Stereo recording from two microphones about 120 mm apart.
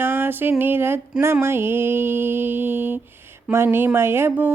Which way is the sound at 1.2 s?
20° right (ahead or behind).